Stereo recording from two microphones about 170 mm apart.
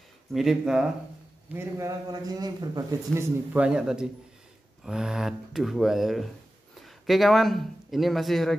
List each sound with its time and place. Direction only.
0.3 s speech: centre (ahead or behind)
1.5 s a man's voice: 15° right (ahead or behind)
3.5 s speech: 5° right (ahead or behind)